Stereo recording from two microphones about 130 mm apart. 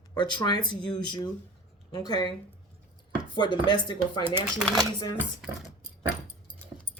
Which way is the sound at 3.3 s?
35° left (ahead or behind).